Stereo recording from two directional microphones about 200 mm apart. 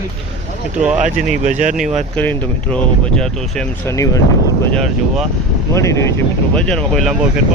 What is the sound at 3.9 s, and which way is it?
Speech, 15° left (ahead or behind).